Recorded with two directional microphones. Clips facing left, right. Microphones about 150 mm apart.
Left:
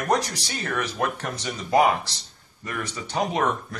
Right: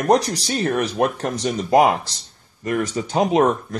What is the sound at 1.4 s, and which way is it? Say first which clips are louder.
Speech: right 5 dB; 45° right (ahead or behind).